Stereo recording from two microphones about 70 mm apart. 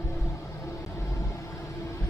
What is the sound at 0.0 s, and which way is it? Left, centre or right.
Vehicle, left.